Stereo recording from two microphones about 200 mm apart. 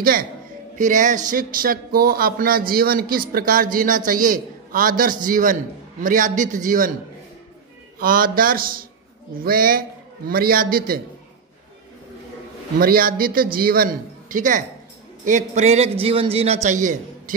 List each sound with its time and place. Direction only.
0.0 s a man's voice: 45° right (ahead or behind)
8.0 s a man's voice: 45° right (ahead or behind)
12.7 s a man's voice: 45° right (ahead or behind)